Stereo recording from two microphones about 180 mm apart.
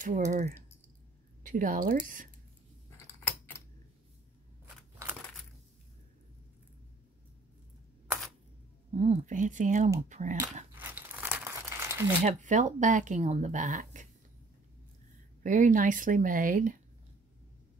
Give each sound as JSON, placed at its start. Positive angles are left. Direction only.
{"t": 0.0, "sound": "speech", "side_deg": -45}
{"t": 3.3, "sound": "typewriter", "side_deg": 10}
{"t": 8.9, "sound": "speech", "side_deg": -40}
{"t": 10.7, "sound": "crumpling", "side_deg": -10}
{"t": 12.2, "sound": "speech", "side_deg": -40}
{"t": 15.4, "sound": "speech", "side_deg": -45}